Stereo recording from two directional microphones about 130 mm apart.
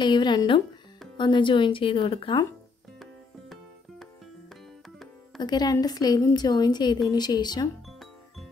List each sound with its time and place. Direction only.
0.0 s a woman's voice: 35° left (ahead or behind)
5.4 s a woman's voice: 35° left (ahead or behind)
7.8 s music: centre (ahead or behind)